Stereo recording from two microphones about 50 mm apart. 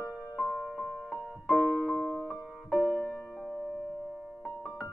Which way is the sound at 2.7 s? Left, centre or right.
Left.